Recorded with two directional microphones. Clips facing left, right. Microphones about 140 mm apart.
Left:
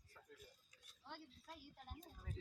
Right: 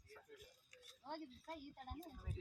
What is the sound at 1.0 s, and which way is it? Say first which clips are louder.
Speech: right 7 dB; 45° right (ahead or behind).